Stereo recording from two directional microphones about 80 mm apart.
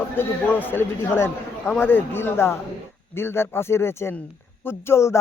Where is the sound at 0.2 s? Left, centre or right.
Left.